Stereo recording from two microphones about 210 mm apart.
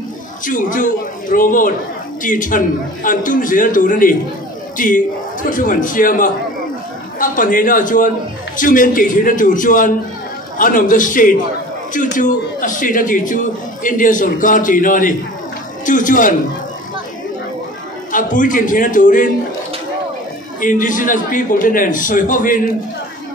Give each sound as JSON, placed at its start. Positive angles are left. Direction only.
{"t": 0.5, "sound": "a man's voice", "side_deg": 40}
{"t": 18.1, "sound": "a man's voice", "side_deg": 40}
{"t": 20.6, "sound": "a man's voice", "side_deg": 40}